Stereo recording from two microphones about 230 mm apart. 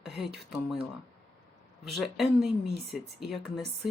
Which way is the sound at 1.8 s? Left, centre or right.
Centre.